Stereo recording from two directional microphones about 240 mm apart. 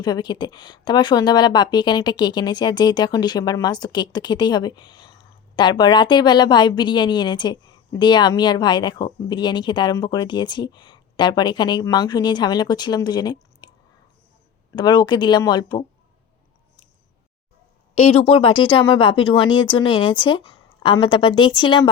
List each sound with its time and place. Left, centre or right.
0.0 s a woman's voice: centre
14.8 s a woman's voice: centre
17.9 s speech: left